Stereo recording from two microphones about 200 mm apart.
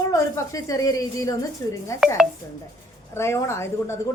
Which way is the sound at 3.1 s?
15° left (ahead or behind).